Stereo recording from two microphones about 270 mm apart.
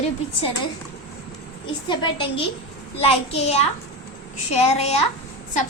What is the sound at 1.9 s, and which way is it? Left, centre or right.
A woman's voice, centre.